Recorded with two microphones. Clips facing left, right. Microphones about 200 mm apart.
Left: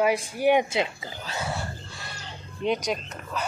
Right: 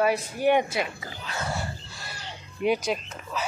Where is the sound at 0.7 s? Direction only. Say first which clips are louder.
Left 2 dB; 25° left (ahead or behind).